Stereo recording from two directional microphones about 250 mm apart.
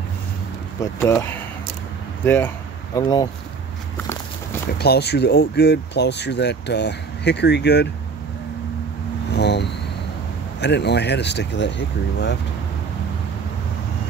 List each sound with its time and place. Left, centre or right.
0.9 s speech: centre
4.7 s speech: left
9.3 s vehicle: left
10.6 s speech: left